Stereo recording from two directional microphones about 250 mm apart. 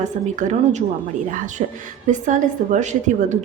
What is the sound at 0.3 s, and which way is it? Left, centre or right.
Speech, right.